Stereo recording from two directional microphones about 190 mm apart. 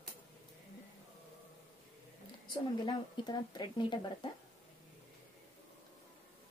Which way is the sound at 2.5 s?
25° left (ahead or behind).